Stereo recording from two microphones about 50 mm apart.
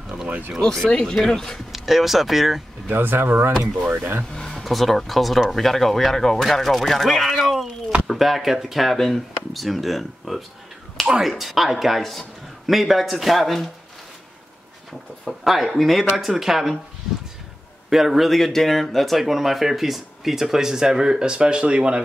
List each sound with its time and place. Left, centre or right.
0.8 s speech: centre
1.7 s speech: centre
2.9 s speech: right
4.3 s a sound: centre
4.6 s speech: centre
14.9 s speech: centre
17.8 s speech: centre